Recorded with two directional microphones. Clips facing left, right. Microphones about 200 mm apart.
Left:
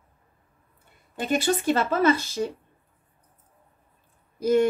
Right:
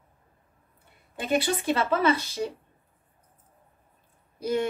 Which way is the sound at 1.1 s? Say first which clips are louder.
Left 2 dB; 45° left (ahead or behind).